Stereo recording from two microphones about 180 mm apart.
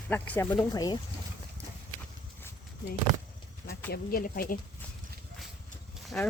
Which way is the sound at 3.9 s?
55° left (ahead or behind).